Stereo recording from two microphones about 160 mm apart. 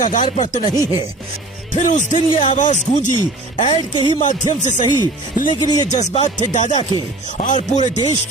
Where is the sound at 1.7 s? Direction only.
50° left (ahead or behind).